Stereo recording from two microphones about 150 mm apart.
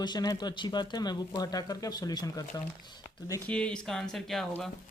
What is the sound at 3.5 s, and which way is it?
Speech, 5° left (ahead or behind).